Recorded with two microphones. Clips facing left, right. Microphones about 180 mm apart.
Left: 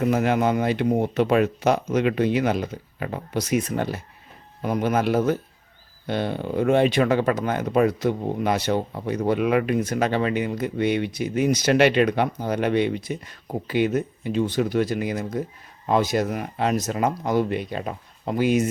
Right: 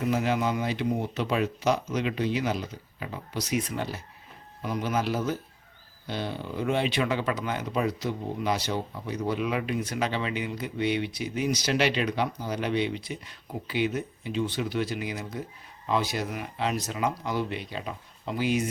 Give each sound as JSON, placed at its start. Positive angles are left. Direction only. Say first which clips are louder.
{"t": 0.0, "sound": "speech", "louder": "left 6 dB", "side_deg": 55}